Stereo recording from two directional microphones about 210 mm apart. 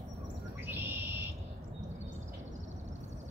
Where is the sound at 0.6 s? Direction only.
10° right (ahead or behind).